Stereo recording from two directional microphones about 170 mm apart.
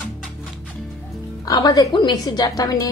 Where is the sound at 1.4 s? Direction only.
20° left (ahead or behind).